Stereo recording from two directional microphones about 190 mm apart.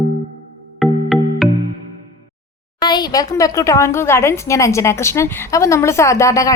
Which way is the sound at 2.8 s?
20° left (ahead or behind).